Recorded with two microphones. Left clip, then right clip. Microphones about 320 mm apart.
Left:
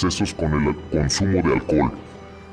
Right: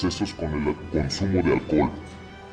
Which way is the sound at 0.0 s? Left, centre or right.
Left.